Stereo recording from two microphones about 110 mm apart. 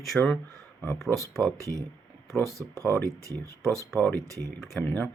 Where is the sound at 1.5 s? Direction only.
30° right (ahead or behind).